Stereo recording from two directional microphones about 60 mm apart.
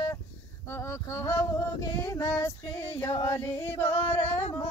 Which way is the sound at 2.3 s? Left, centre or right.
Left.